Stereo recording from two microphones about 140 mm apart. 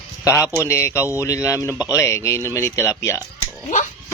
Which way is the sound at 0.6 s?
20° left (ahead or behind).